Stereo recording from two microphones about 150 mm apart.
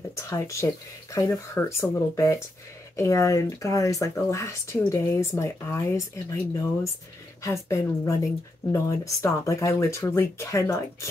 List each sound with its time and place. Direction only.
0.3 s speech: 20° left (ahead or behind)
7.4 s speech: 20° left (ahead or behind)